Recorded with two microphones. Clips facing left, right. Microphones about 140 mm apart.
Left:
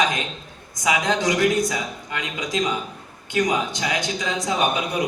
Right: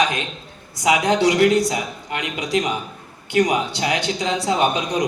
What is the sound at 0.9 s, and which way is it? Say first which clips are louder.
A man's voice: right 4 dB; 20° right (ahead or behind).